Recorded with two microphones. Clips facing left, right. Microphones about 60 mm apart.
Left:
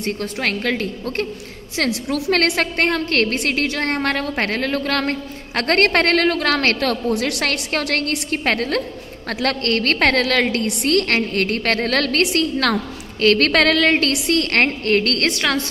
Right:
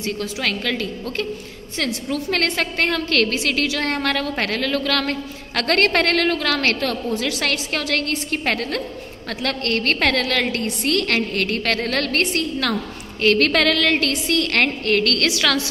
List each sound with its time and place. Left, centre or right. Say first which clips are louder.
0.0 s a woman's voice: left 2 dB; left
1.9 s a woman's voice: left 4 dB; left
2.3 s a woman's voice: left 3 dB; left